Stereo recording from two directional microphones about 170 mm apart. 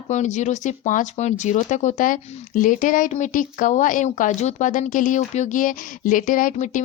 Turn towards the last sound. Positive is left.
turn(degrees=45)  # may be behind; listen again after turning